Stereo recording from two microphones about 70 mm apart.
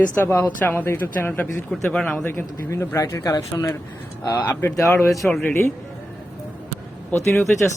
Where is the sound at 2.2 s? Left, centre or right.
Left.